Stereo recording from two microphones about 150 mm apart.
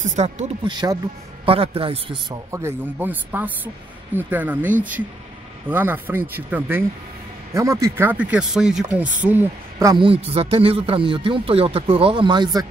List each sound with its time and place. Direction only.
0.0 s speech: 50° right (ahead or behind)
0.7 s speech: 30° right (ahead or behind)
1.4 s speech: 40° right (ahead or behind)
2.5 s speech: 15° right (ahead or behind)
5.7 s speech: 15° right (ahead or behind)
9.9 s speech: 40° right (ahead or behind)